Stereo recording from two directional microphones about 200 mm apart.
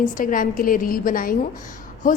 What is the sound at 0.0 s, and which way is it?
A woman's voice, 40° left (ahead or behind).